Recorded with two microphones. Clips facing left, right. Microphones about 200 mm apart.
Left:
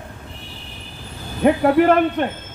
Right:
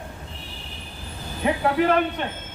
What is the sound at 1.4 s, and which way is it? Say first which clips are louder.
Speech: left 8 dB; 55° left (ahead or behind).